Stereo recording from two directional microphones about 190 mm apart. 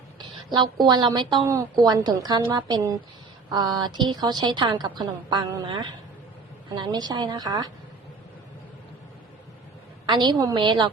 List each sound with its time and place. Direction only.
0.5 s a woman's voice: 25° right (ahead or behind)
10.1 s a woman's voice: 20° right (ahead or behind)